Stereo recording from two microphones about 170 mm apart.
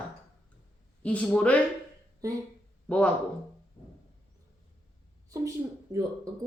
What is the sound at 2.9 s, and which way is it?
Speech, 5° left (ahead or behind).